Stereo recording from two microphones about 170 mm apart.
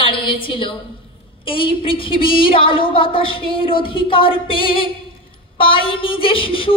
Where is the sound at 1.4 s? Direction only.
30° left (ahead or behind).